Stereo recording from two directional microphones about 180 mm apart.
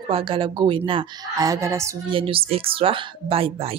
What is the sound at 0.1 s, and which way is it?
Speech, 30° right (ahead or behind).